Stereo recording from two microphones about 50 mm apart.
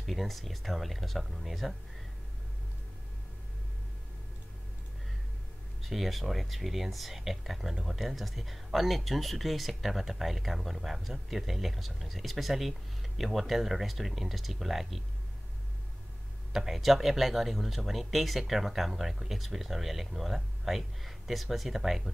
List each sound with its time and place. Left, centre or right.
0.0 s speech: centre
5.8 s speech: centre
16.5 s speech: centre